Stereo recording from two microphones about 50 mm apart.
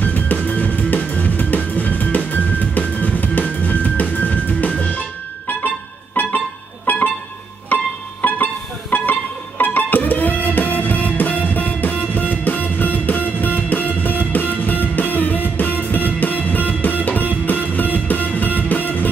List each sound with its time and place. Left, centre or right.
0.0 s music: left
6.2 s music: left